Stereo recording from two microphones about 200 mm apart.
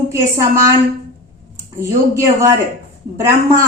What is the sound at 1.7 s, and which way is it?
Speech, 15° right (ahead or behind).